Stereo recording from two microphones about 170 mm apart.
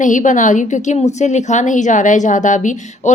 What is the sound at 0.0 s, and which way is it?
A woman's voice, 50° left (ahead or behind).